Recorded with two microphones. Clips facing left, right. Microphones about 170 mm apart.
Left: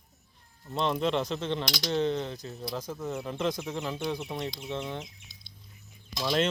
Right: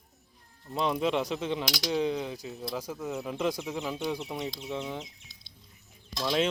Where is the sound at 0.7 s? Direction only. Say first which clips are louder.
Even; 5° right (ahead or behind).